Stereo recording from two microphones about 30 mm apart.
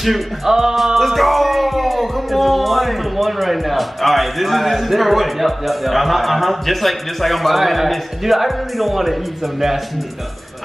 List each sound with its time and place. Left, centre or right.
0.5 s music: centre
0.9 s music: centre